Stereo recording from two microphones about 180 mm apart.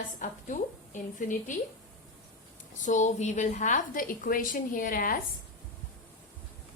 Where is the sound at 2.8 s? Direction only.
45° left (ahead or behind).